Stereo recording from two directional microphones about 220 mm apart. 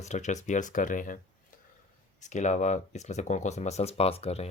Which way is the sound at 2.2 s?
35° left (ahead or behind).